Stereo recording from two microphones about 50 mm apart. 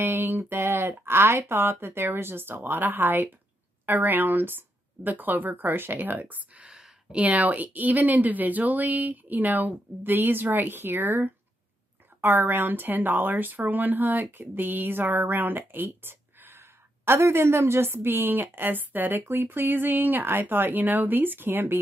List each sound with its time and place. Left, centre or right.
0.0 s speech: right
6.7 s speech: right